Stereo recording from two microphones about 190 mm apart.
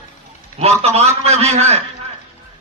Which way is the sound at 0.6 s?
35° right (ahead or behind).